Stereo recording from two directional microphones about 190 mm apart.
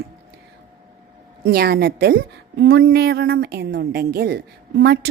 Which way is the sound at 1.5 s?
55° right (ahead or behind).